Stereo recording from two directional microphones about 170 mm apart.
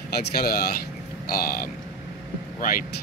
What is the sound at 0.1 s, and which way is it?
Speech, 65° left (ahead or behind).